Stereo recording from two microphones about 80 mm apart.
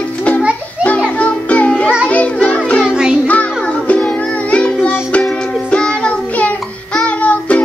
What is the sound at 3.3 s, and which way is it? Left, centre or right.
Music, centre.